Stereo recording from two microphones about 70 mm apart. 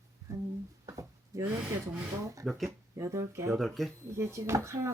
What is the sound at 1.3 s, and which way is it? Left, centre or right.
Speech, right.